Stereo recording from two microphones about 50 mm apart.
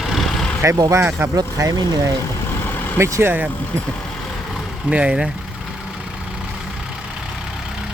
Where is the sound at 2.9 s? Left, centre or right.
Right.